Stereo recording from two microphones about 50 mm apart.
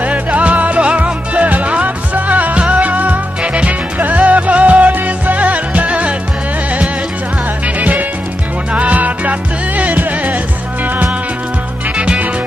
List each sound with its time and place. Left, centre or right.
0.0 s music: right
7.6 s music: right
12.0 s music: right